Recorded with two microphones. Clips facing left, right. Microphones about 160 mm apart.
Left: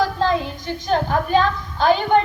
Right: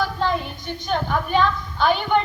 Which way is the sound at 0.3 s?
90° left.